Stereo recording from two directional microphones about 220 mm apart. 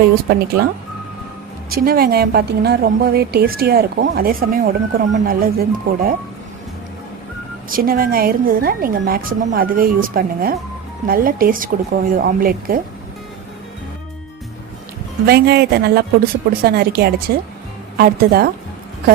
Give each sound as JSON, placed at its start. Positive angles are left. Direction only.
{"t": 0.0, "sound": "speech", "side_deg": -45}
{"t": 1.7, "sound": "speech", "side_deg": -45}
{"t": 7.7, "sound": "a woman's voice", "side_deg": -40}
{"t": 15.3, "sound": "speech", "side_deg": -45}